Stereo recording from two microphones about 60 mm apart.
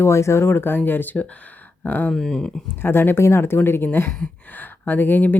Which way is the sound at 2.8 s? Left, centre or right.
Left.